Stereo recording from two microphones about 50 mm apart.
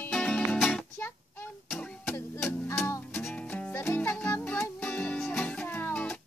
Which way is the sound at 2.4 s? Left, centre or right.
Left.